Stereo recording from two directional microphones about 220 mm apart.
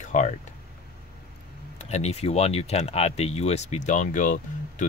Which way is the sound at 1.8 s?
30° left (ahead or behind).